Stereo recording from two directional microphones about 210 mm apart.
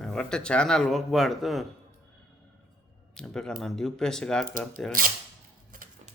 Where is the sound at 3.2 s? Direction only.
5° left (ahead or behind).